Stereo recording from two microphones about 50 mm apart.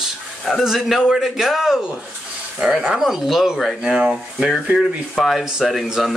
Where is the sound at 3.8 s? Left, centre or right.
Centre.